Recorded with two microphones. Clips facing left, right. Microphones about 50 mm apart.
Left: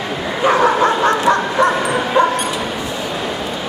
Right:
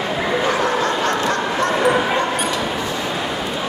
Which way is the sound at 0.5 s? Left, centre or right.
Left.